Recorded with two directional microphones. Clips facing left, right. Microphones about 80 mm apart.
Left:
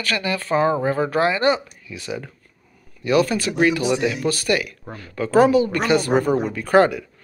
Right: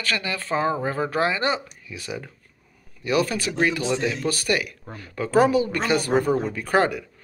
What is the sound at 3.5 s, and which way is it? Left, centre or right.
Speech, centre.